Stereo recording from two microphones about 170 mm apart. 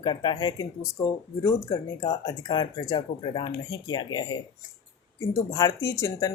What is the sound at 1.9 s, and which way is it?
Speech, 20° left (ahead or behind).